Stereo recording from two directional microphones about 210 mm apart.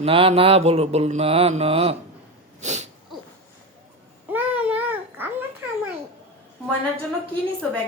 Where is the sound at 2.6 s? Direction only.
35° right (ahead or behind).